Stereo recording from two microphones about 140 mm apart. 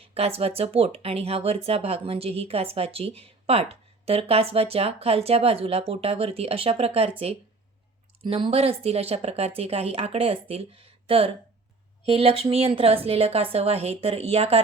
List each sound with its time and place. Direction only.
0.0 s speech: 45° right (ahead or behind)
8.2 s speech: 40° right (ahead or behind)